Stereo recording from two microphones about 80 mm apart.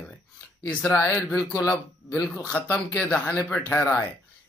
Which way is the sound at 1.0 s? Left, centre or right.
Left.